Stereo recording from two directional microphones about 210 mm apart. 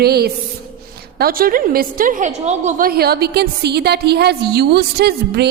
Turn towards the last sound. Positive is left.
turn(degrees=-50)  # may be behind; listen again after turning